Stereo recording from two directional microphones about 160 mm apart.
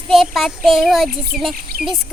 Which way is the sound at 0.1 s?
Centre (ahead or behind).